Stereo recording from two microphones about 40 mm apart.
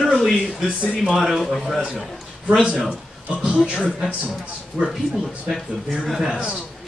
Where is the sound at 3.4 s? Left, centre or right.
Right.